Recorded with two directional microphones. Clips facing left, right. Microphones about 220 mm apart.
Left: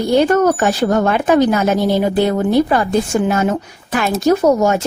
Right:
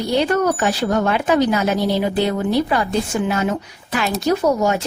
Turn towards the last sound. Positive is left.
turn(degrees=45)  # may be behind; listen again after turning